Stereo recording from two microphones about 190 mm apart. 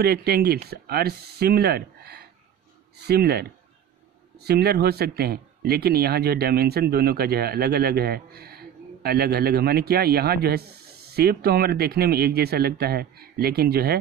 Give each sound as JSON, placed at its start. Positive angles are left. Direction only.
{"t": 0.0, "sound": "speech", "side_deg": -55}